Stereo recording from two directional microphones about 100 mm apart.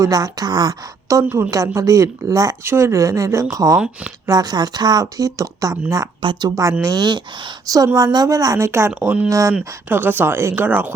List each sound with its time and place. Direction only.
0.0 s a woman's voice: 40° right (ahead or behind)
1.2 s a woman's voice: 25° right (ahead or behind)
9.0 s speech: 15° right (ahead or behind)
9.3 s a woman's voice: 35° right (ahead or behind)
9.9 s speech: 20° right (ahead or behind)